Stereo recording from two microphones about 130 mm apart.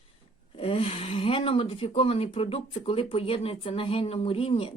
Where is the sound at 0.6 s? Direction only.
45° left (ahead or behind).